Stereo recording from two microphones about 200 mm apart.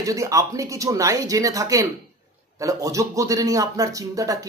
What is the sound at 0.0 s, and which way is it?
Speech, 15° right (ahead or behind).